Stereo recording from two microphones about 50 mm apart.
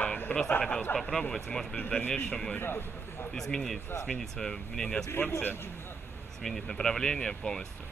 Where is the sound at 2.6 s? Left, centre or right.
Left.